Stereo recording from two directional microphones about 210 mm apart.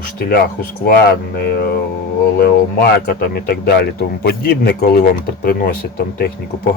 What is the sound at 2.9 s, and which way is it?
Speech, 45° left (ahead or behind).